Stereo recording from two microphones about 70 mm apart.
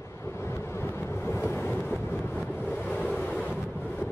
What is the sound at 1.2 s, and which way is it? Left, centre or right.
Vehicle, left.